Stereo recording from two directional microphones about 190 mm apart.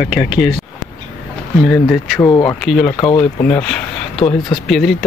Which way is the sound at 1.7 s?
Centre (ahead or behind).